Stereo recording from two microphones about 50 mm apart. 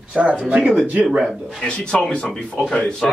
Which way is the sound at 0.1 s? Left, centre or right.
Right.